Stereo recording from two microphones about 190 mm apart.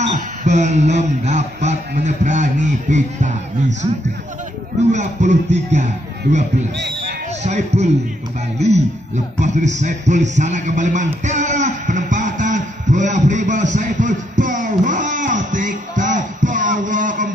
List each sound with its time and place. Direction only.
0.0 s speech: 40° right (ahead or behind)
4.9 s speech: 40° right (ahead or behind)
7.4 s speech: 35° right (ahead or behind)
11.2 s a sound: 40° right (ahead or behind)